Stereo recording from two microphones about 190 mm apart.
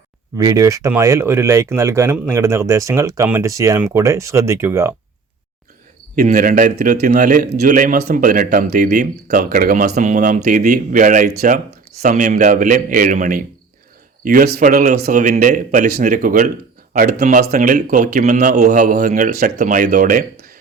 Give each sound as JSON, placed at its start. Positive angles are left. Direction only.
{"t": 0.3, "sound": "speech", "side_deg": -15}
{"t": 6.1, "sound": "speech", "side_deg": -50}